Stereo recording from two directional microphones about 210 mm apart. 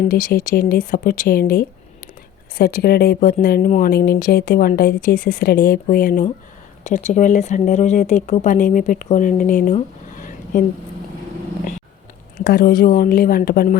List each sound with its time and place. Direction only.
0.1 s speech: 40° left (ahead or behind)
12.5 s speech: 45° left (ahead or behind)